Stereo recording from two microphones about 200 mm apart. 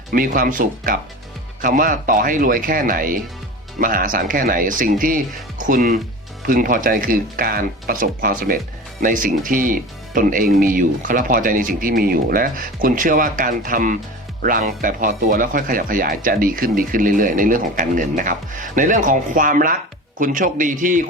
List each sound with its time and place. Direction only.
0.1 s a man's voice: 45° right (ahead or behind)